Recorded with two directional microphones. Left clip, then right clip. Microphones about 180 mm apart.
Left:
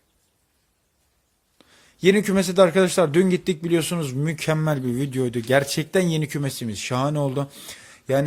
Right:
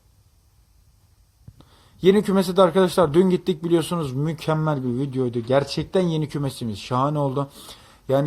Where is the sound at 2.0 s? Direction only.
15° left (ahead or behind).